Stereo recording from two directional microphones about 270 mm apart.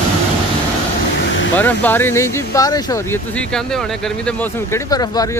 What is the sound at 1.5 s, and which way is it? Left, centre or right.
Speech, centre.